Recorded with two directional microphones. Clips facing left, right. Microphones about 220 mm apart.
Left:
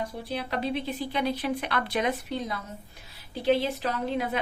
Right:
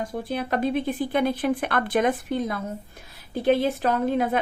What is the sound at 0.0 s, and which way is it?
A woman's voice, 50° right (ahead or behind).